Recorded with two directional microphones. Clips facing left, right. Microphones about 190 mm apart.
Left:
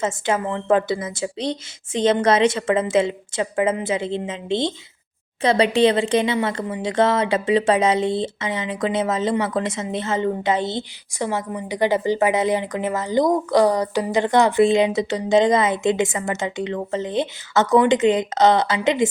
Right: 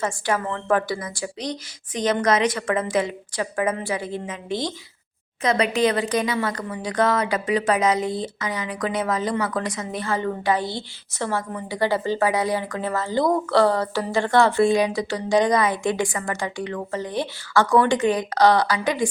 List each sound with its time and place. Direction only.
0.0 s speech: 20° left (ahead or behind)